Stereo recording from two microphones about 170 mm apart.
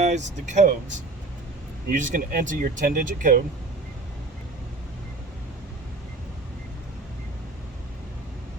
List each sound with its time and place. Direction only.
0.0 s speech: 45° right (ahead or behind)
1.9 s speech: 50° right (ahead or behind)